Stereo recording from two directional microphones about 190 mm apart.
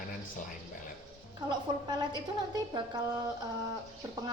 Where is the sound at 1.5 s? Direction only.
25° right (ahead or behind).